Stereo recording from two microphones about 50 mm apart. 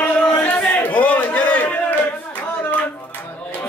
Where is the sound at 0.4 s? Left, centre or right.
Left.